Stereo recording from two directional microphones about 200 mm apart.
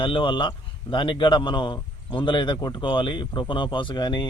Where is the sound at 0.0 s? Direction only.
25° left (ahead or behind).